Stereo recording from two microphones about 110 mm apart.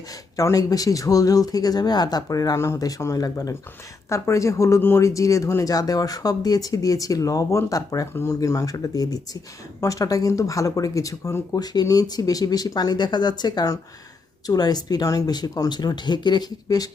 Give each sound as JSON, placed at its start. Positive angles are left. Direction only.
{"t": 0.3, "sound": "speech", "side_deg": 30}